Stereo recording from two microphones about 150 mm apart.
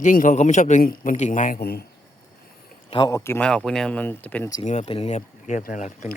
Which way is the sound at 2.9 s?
35° left (ahead or behind).